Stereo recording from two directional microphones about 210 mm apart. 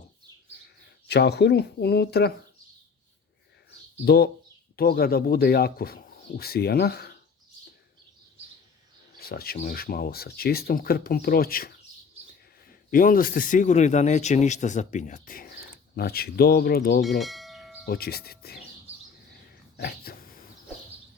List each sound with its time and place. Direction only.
1.0 s speech: 50° left (ahead or behind)
4.0 s speech: 50° left (ahead or behind)
9.1 s speech: 45° left (ahead or behind)
12.9 s speech: 40° left (ahead or behind)
17.2 s bell: centre (ahead or behind)
17.8 s speech: 45° left (ahead or behind)
19.7 s a sound: 50° left (ahead or behind)